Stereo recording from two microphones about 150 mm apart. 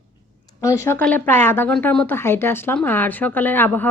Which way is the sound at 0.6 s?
20° left (ahead or behind).